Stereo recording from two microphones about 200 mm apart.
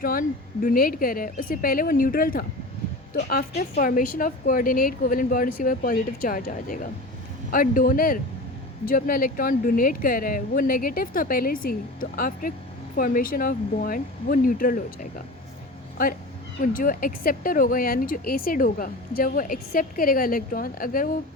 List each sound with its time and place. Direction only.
0.0 s speech: 45° left (ahead or behind)
16.6 s speech: 45° left (ahead or behind)